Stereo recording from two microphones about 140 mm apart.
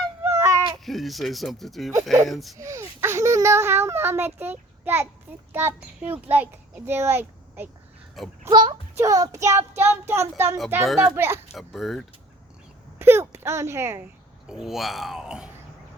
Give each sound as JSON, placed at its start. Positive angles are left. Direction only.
{"t": 0.2, "sound": "a sound", "side_deg": -20}
{"t": 0.9, "sound": "speech", "side_deg": 0}
{"t": 2.6, "sound": "a child's voice", "side_deg": -20}
{"t": 8.4, "sound": "speech", "side_deg": -30}
{"t": 10.8, "sound": "speech", "side_deg": 0}
{"t": 11.1, "sound": "speech", "side_deg": -15}
{"t": 11.5, "sound": "speech", "side_deg": 0}
{"t": 13.0, "sound": "speech", "side_deg": -15}
{"t": 14.5, "sound": "speech", "side_deg": -5}